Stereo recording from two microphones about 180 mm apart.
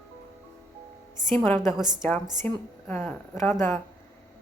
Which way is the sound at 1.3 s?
10° left (ahead or behind).